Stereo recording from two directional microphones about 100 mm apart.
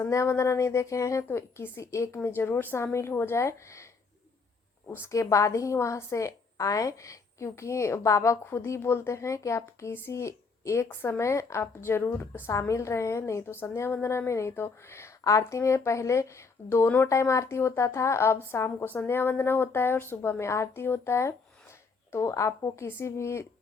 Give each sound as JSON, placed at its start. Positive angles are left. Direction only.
{"t": 0.0, "sound": "speech", "side_deg": 30}
{"t": 4.9, "sound": "speech", "side_deg": 25}